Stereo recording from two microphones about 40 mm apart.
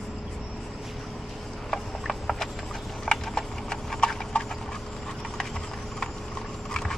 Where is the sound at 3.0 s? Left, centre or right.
Centre.